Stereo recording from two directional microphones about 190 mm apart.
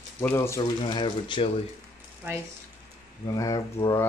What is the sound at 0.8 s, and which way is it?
Speech, 25° left (ahead or behind).